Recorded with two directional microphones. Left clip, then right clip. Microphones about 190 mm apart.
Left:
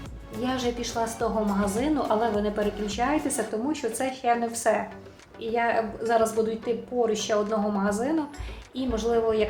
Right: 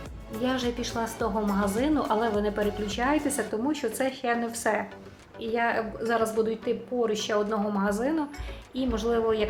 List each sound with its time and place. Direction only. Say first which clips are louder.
0.4 s a woman's voice: even; 25° right (ahead or behind)